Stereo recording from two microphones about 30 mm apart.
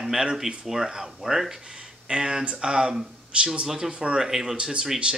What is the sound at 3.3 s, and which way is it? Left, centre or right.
Speech, right.